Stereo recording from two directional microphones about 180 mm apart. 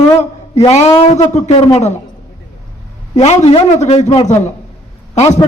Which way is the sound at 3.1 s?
40° left (ahead or behind).